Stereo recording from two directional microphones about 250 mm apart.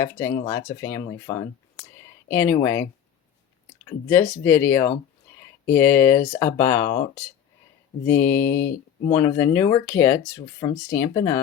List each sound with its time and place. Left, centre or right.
0.0 s speech: centre
4.1 s speech: centre
8.0 s speech: centre